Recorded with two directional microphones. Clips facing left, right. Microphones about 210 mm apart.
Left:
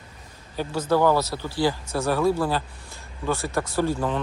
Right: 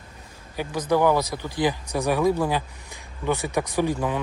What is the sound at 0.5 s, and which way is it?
Speech, 15° right (ahead or behind).